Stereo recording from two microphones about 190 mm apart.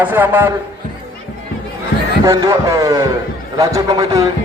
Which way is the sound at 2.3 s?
15° right (ahead or behind).